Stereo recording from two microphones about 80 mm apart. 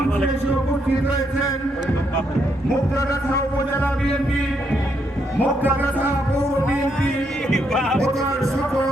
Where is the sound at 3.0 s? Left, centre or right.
Left.